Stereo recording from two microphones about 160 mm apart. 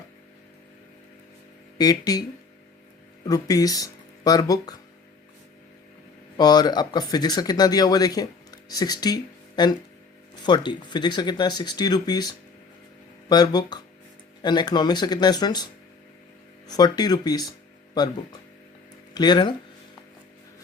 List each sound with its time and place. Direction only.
1.8 s speech: 25° left (ahead or behind)
3.2 s speech: 20° left (ahead or behind)
6.3 s speech: 25° left (ahead or behind)